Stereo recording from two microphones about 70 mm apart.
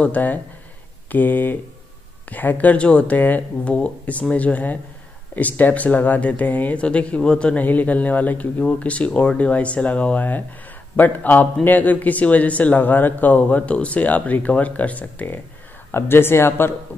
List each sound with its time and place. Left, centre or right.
0.0 s speech: left